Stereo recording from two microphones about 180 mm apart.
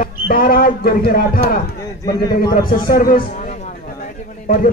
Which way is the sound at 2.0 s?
20° left (ahead or behind).